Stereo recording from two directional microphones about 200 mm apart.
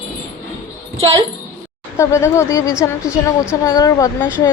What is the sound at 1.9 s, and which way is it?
A woman's voice, 15° left (ahead or behind).